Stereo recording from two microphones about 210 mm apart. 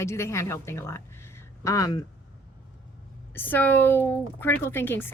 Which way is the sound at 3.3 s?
10° left (ahead or behind).